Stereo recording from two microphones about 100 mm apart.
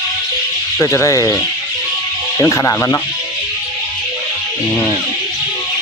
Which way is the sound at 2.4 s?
30° left (ahead or behind).